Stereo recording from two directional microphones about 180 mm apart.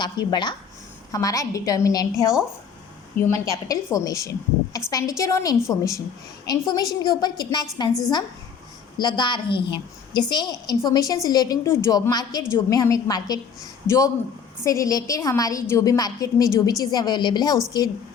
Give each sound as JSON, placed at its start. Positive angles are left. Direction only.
{"t": 0.0, "sound": "a woman's voice", "side_deg": 25}